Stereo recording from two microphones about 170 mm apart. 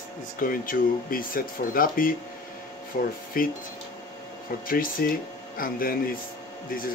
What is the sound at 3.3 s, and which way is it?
Speech, 55° left (ahead or behind).